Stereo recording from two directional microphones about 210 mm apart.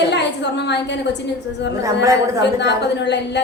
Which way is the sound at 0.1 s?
55° left (ahead or behind).